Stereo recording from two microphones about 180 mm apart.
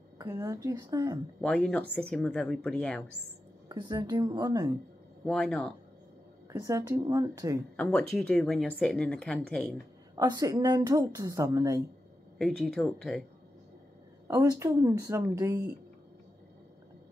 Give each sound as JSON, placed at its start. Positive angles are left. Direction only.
{"t": 0.2, "sound": "a woman's voice", "side_deg": -15}
{"t": 1.4, "sound": "speech", "side_deg": 5}
{"t": 3.6, "sound": "a woman's voice", "side_deg": -25}
{"t": 5.2, "sound": "speech", "side_deg": 5}
{"t": 6.6, "sound": "a woman's voice", "side_deg": -20}
{"t": 7.7, "sound": "speech", "side_deg": 5}
{"t": 10.1, "sound": "a woman's voice", "side_deg": -20}
{"t": 12.4, "sound": "speech", "side_deg": 0}
{"t": 14.2, "sound": "speech", "side_deg": -15}